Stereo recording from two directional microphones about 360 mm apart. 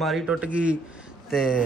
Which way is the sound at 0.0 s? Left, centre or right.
Centre.